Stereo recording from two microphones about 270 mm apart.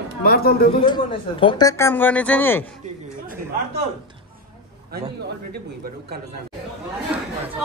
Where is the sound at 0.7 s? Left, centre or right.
Centre.